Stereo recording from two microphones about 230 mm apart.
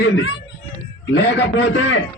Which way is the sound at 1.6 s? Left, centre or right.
Left.